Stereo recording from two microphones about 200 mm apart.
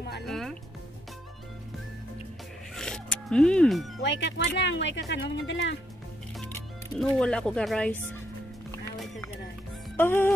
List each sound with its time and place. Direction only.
0.3 s music: centre (ahead or behind)
2.7 s zipper: 5° left (ahead or behind)
4.0 s speech: 60° left (ahead or behind)
7.0 s speech: 5° left (ahead or behind)
9.9 s music: 10° left (ahead or behind)